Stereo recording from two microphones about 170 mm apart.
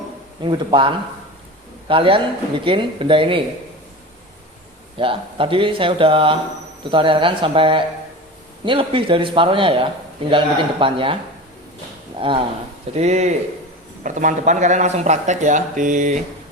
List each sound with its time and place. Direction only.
0.4 s speech: 30° right (ahead or behind)
4.9 s speech: 30° right (ahead or behind)
12.9 s speech: 40° right (ahead or behind)